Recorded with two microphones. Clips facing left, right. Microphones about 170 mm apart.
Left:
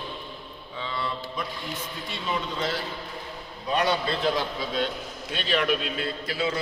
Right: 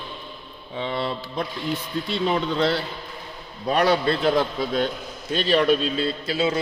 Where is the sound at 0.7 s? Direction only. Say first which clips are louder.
Right 6 dB; 65° right (ahead or behind).